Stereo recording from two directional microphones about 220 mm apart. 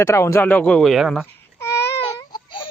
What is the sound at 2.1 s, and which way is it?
Baby cry, 20° left (ahead or behind).